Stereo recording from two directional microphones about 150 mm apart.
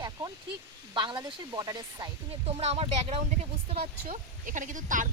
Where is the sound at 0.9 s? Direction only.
30° right (ahead or behind).